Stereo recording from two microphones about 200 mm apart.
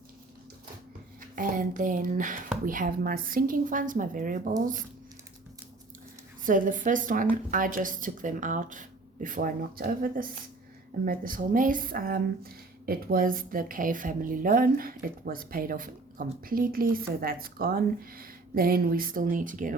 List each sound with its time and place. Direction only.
1.4 s a woman's voice: 45° right (ahead or behind)
6.4 s a woman's voice: 40° right (ahead or behind)